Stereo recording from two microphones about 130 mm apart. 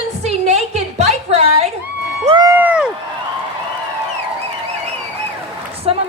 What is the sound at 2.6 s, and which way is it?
Speech, 10° right (ahead or behind).